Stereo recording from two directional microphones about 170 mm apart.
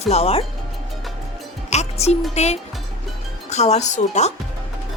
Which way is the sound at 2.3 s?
40° left (ahead or behind).